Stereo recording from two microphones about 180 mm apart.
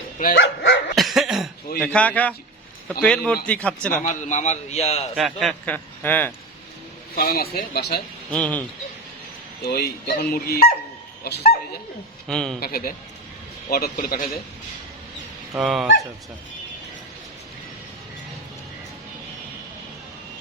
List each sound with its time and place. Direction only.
0.2 s a man's voice: 55° left (ahead or behind)
0.9 s cough: centre (ahead or behind)
1.8 s a man's voice: 5° left (ahead or behind)
4.0 s a man's voice: 45° left (ahead or behind)
5.1 s a man's voice: centre (ahead or behind)
7.2 s speech: 55° left (ahead or behind)
8.3 s a man's voice: 5° left (ahead or behind)
9.6 s speech: 60° left (ahead or behind)
12.3 s speech: 5° left (ahead or behind)
12.5 s a man's voice: 55° left (ahead or behind)
15.5 s speech: 5° right (ahead or behind)